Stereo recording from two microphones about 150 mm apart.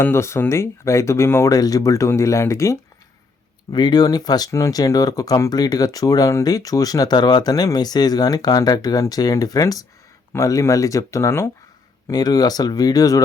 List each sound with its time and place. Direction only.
0.0 s speech: 15° left (ahead or behind)